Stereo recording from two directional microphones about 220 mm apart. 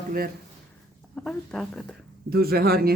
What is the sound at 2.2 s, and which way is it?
Speech, 45° right (ahead or behind).